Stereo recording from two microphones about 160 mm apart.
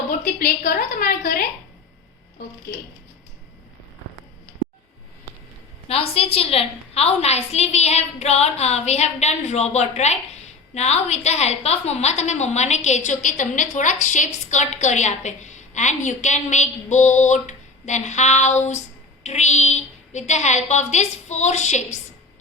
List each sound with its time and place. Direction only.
0.1 s a woman's voice: 60° left (ahead or behind)
5.9 s a woman's voice: 35° left (ahead or behind)